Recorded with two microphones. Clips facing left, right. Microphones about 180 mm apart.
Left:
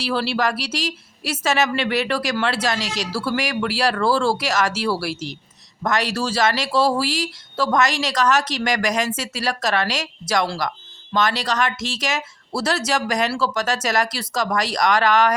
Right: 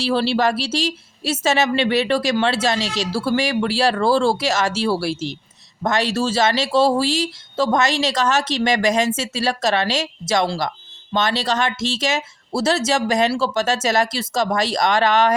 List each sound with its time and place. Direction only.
0.0 s speech: 25° right (ahead or behind)